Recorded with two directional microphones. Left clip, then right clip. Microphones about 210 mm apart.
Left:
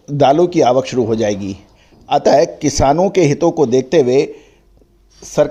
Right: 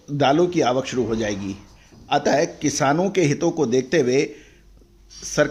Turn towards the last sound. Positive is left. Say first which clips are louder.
# left 6 dB
turn(degrees=20)  # may be behind; listen again after turning